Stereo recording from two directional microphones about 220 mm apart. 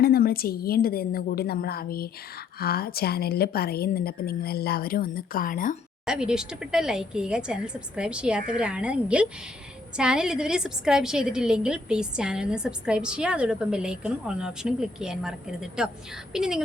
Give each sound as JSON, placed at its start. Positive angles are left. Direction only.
{"t": 0.0, "sound": "a woman's voice", "side_deg": 45}
{"t": 6.1, "sound": "a woman's voice", "side_deg": -5}